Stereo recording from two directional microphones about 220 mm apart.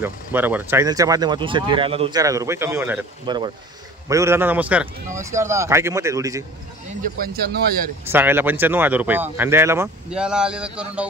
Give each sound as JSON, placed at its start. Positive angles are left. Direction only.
{"t": 0.0, "sound": "speech", "side_deg": -10}
{"t": 7.2, "sound": "speech", "side_deg": -45}
{"t": 8.1, "sound": "speech", "side_deg": -10}